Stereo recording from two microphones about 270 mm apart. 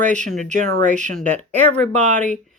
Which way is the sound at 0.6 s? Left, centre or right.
Right.